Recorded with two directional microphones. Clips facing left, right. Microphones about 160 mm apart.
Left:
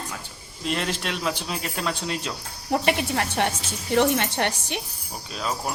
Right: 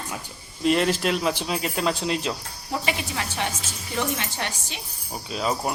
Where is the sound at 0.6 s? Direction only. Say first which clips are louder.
Right 6 dB; centre (ahead or behind).